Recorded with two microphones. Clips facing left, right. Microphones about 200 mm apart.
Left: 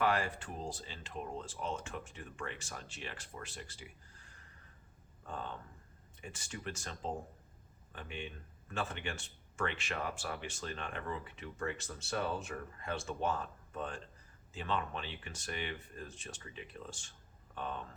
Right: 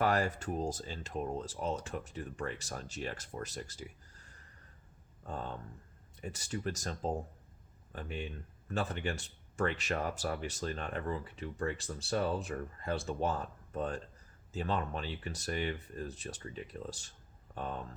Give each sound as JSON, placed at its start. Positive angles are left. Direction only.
{"t": 0.0, "sound": "speech", "side_deg": -40}